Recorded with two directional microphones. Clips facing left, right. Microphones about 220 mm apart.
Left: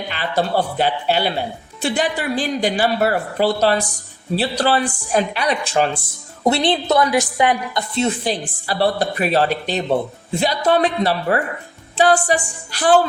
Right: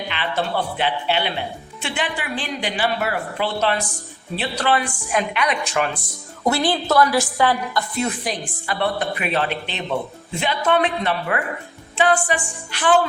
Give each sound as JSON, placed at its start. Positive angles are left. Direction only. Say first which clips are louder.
{"t": 0.1, "sound": "a woman's voice", "louder": "left 5 dB", "side_deg": 40}